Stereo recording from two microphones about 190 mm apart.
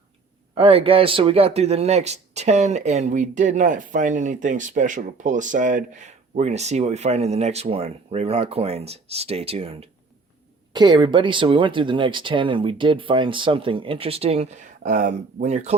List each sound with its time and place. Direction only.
0.5 s speech: 30° right (ahead or behind)